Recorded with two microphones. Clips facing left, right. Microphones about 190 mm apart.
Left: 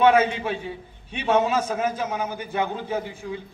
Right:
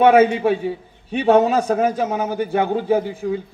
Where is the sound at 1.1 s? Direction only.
40° right (ahead or behind).